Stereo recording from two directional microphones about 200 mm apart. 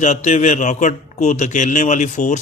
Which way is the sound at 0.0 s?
35° left (ahead or behind).